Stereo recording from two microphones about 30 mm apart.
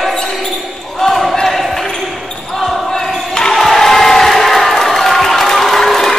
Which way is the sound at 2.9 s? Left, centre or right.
Left.